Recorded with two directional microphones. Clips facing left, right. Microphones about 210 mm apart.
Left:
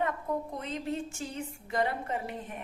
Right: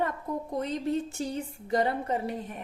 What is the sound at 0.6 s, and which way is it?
Speech, 35° right (ahead or behind).